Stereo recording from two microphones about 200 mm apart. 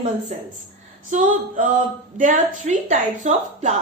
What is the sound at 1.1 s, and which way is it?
A woman's voice, 40° right (ahead or behind).